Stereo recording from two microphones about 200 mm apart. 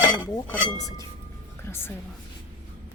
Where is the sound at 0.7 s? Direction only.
15° left (ahead or behind).